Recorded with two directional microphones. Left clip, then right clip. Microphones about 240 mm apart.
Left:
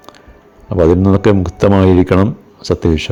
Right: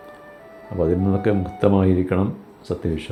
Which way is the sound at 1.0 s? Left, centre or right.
Left.